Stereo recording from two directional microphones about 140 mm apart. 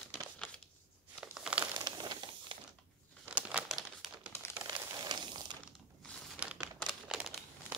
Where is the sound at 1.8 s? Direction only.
30° right (ahead or behind).